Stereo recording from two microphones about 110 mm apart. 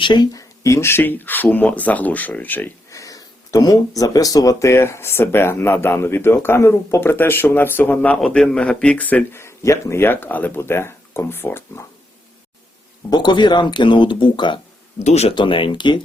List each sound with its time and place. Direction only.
0.0 s speech: 40° left (ahead or behind); by 2.7 s 15° left (ahead or behind)
2.9 s speech: 30° left (ahead or behind); by 9.4 s 15° left (ahead or behind)
9.4 s speech: 25° left (ahead or behind)
13.1 s speech: 40° left (ahead or behind)
14.9 s speech: 85° left
15.4 s speech: 50° left (ahead or behind)